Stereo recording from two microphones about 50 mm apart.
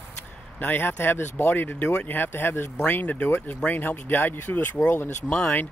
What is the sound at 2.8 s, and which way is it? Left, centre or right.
Speech, left.